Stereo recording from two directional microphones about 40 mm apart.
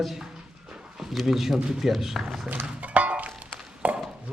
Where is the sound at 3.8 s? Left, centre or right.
Right.